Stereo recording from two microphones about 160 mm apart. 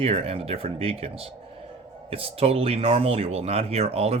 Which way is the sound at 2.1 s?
35° right (ahead or behind).